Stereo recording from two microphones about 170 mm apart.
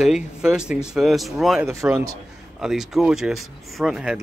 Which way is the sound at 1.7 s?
15° right (ahead or behind).